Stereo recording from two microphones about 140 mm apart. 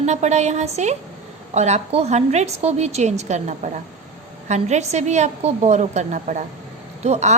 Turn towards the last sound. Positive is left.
turn(degrees=-55)  # may be behind; listen again after turning